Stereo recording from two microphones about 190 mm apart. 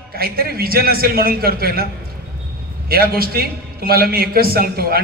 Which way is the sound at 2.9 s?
50° right (ahead or behind).